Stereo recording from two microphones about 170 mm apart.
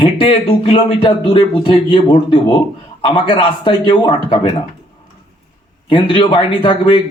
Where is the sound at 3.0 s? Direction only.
30° left (ahead or behind).